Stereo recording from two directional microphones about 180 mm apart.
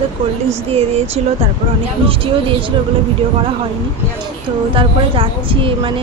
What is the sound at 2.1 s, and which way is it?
Speech, 30° right (ahead or behind).